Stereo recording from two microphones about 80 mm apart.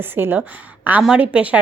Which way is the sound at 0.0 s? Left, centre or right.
Right.